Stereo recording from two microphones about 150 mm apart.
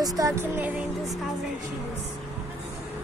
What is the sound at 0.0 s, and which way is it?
Music, 20° right (ahead or behind).